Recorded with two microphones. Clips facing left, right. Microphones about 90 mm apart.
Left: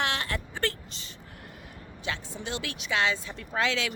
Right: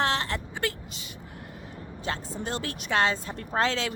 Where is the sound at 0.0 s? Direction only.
30° right (ahead or behind).